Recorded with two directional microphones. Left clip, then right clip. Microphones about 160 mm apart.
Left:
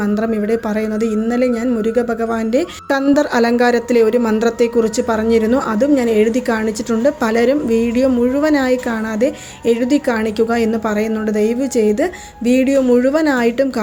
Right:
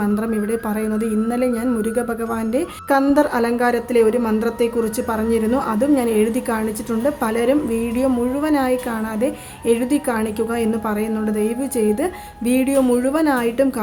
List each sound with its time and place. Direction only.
0.0 s a woman's voice: 20° left (ahead or behind)